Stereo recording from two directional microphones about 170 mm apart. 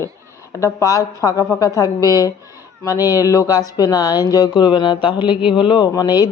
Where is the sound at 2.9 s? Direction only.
15° right (ahead or behind).